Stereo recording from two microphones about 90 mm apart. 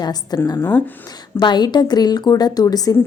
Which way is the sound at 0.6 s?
20° left (ahead or behind).